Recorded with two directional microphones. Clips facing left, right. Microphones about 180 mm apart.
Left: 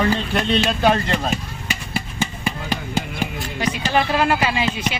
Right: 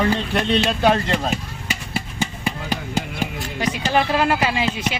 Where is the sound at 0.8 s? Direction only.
15° right (ahead or behind).